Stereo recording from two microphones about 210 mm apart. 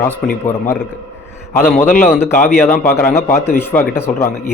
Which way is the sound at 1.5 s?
10° left (ahead or behind).